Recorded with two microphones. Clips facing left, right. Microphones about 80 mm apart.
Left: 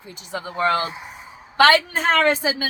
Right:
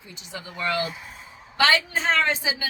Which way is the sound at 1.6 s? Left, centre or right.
Left.